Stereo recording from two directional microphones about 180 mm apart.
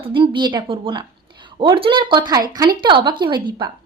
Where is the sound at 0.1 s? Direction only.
25° right (ahead or behind).